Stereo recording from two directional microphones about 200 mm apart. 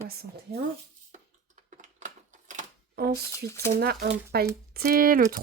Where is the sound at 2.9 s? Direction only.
50° right (ahead or behind).